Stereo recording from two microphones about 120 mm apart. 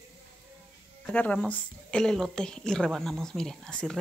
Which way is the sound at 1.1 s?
10° left (ahead or behind).